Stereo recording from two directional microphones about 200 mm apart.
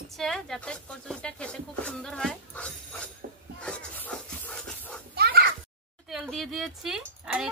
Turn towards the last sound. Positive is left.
turn(degrees=-5)  # may be behind; listen again after turning